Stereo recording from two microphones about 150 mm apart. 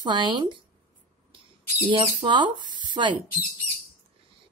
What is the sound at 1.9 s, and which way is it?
Speech, 30° right (ahead or behind).